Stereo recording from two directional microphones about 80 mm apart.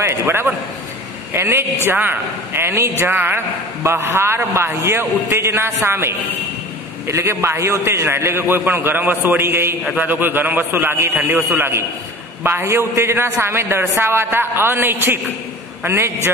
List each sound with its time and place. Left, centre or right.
0.0 s a man's voice: right